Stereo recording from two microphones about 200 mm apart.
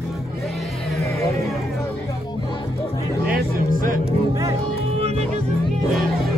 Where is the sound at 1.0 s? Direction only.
15° left (ahead or behind).